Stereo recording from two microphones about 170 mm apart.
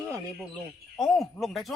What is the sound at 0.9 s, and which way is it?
Speech, centre (ahead or behind).